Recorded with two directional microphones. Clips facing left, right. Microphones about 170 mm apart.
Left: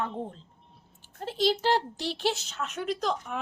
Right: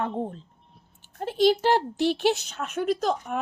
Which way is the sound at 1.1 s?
55° right (ahead or behind).